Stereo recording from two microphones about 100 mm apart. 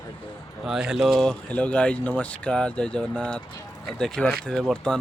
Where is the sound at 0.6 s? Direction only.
5° right (ahead or behind).